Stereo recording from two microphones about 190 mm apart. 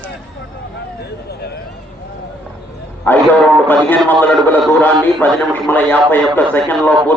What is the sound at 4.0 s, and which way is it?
A man's voice, centre (ahead or behind).